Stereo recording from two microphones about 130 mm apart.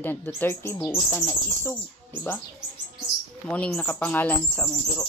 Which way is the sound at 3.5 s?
10° left (ahead or behind).